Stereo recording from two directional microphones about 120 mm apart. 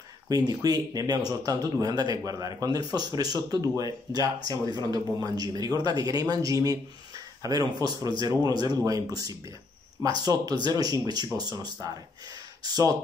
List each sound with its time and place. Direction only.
0.3 s speech: 30° right (ahead or behind)